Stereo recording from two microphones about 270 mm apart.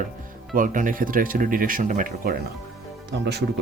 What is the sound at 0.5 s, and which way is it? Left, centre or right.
Speech, right.